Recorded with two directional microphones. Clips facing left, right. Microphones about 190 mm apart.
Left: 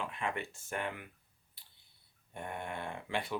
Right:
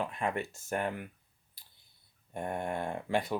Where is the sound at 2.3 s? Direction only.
40° right (ahead or behind).